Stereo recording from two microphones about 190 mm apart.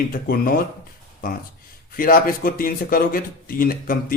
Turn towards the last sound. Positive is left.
turn(degrees=50)  # may be behind; listen again after turning